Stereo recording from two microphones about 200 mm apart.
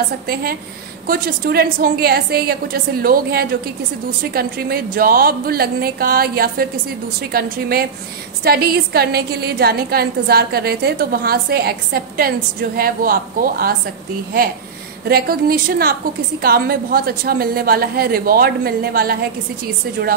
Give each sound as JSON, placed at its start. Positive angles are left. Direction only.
{"t": 0.3, "sound": "a woman's voice", "side_deg": -50}
{"t": 15.0, "sound": "a woman's voice", "side_deg": -50}